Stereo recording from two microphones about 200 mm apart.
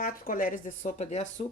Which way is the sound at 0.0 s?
45° left (ahead or behind).